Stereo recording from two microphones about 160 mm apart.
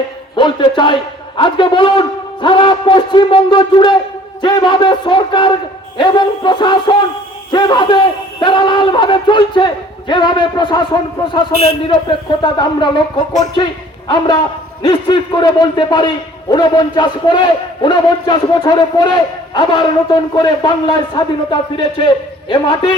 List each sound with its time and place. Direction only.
0.3 s a sound: 30° left (ahead or behind)
1.4 s a man's voice: 30° left (ahead or behind)
14.8 s a man's voice: 30° left (ahead or behind)